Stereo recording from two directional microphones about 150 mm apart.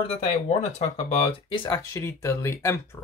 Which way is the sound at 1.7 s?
20° left (ahead or behind).